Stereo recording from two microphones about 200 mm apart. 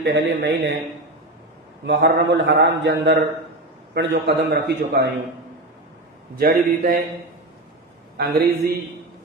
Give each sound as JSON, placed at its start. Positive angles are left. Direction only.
{"t": 0.0, "sound": "a man's voice", "side_deg": -60}
{"t": 1.9, "sound": "a man's voice", "side_deg": -65}
{"t": 6.4, "sound": "a man's voice", "side_deg": -50}
{"t": 8.2, "sound": "a man's voice", "side_deg": -50}